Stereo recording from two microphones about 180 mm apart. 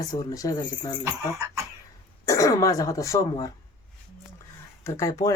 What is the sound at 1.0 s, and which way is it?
Speech, 15° right (ahead or behind).